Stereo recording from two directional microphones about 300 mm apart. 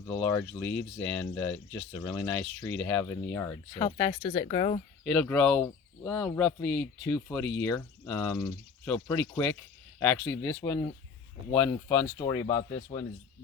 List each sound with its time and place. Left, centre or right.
0.1 s speech: centre
5.0 s speech: centre